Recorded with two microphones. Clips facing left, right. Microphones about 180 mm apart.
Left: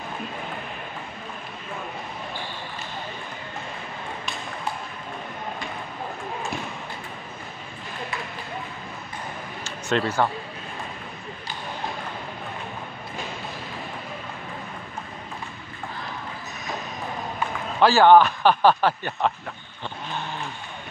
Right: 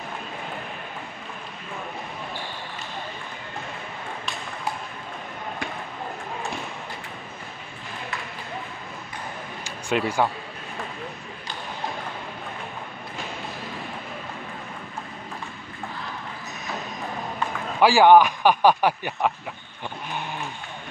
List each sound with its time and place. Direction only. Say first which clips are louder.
9.7 s speech: even; 10° right (ahead or behind)
17.7 s speech: even; 10° right (ahead or behind)